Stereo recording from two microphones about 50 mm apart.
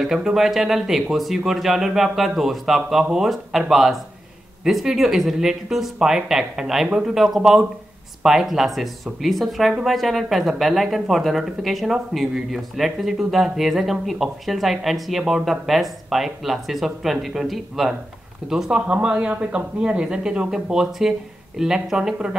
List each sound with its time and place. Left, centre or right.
0.0 s speech: centre
18.7 s speech: right